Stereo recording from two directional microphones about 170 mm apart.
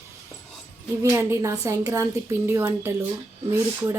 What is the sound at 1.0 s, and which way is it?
A woman's voice, 15° right (ahead or behind).